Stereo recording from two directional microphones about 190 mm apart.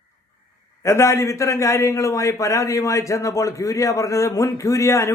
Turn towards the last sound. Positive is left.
turn(degrees=15)  # may be behind; listen again after turning